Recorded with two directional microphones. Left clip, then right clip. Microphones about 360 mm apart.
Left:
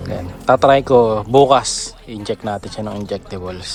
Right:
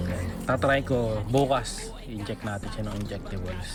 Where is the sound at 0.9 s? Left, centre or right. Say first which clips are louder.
Left 14 dB; left.